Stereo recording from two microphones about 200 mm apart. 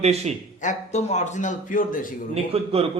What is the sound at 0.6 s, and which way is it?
A man's voice, 35° left (ahead or behind).